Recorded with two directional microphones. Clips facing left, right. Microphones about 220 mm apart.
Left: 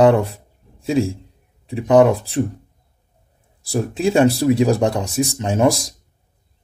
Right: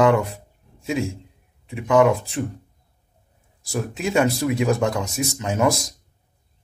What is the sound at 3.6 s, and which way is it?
Speech, 35° left (ahead or behind).